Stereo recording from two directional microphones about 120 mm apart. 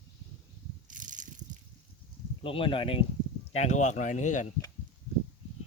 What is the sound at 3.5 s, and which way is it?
Speech, 70° left (ahead or behind).